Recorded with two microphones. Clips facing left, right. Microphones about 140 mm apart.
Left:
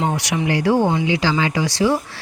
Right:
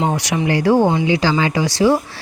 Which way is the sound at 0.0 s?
45° right (ahead or behind).